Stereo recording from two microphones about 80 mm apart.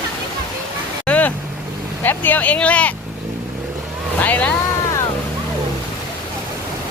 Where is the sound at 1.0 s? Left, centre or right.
Centre.